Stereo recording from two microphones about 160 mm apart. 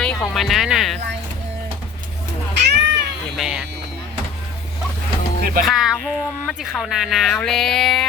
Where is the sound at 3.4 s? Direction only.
5° right (ahead or behind).